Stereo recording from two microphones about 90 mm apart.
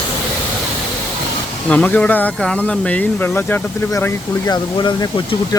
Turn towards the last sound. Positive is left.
turn(degrees=55)  # may be behind; listen again after turning